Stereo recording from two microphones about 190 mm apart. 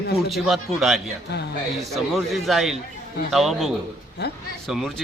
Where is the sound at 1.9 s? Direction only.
Centre (ahead or behind).